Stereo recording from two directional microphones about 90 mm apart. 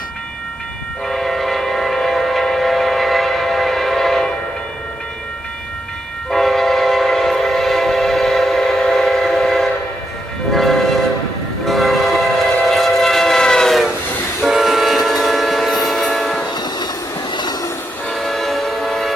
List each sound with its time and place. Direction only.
1.0 s train: centre (ahead or behind)
6.3 s train: 5° left (ahead or behind)
17.3 s train: 50° left (ahead or behind)
18.1 s train: centre (ahead or behind)